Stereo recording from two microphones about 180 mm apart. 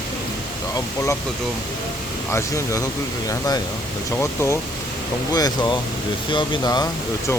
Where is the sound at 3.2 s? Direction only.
20° left (ahead or behind).